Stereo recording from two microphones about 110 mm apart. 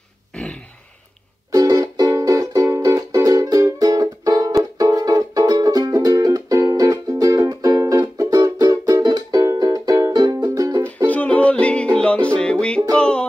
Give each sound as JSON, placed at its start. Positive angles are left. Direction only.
{"t": 1.5, "sound": "music", "side_deg": -35}
{"t": 11.1, "sound": "music", "side_deg": 10}